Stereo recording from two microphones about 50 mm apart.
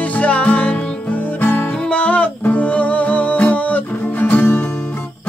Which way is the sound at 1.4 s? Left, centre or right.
Left.